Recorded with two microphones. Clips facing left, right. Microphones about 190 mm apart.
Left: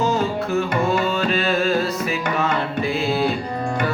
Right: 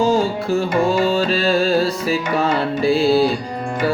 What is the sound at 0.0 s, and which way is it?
Music, 30° right (ahead or behind).